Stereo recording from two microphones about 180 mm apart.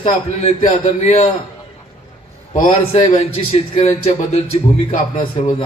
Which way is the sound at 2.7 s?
35° left (ahead or behind).